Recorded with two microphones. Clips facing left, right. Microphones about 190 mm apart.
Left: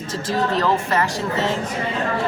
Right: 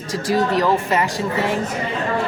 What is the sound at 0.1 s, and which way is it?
Speech, 10° right (ahead or behind).